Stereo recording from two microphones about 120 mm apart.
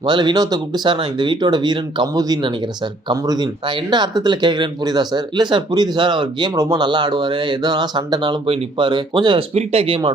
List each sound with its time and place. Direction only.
0.0 s speech: 40° right (ahead or behind)
9.6 s speech: 55° right (ahead or behind)